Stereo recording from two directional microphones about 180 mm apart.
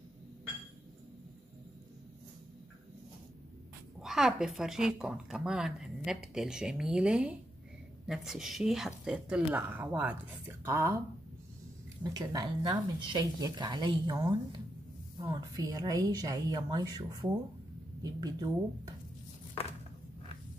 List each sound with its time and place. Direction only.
4.0 s speech: centre (ahead or behind)
12.0 s speech: 20° right (ahead or behind)